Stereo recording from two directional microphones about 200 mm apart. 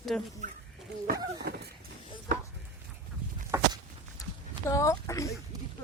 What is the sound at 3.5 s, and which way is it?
Walk, 15° right (ahead or behind).